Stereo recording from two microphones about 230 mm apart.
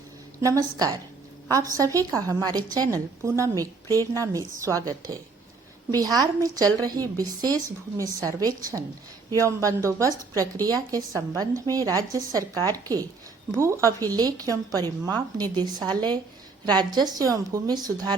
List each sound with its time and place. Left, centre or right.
0.4 s a woman's voice: centre